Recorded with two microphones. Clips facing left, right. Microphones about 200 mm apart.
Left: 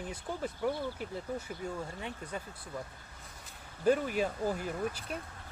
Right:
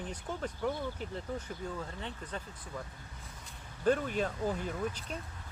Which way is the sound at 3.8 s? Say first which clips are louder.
Left 1 dB; 10° left (ahead or behind).